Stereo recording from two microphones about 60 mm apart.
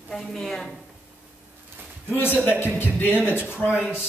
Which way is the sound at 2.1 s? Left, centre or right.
Left.